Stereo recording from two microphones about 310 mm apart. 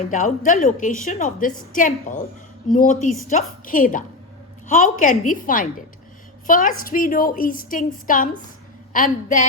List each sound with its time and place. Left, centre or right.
0.1 s a woman's voice: left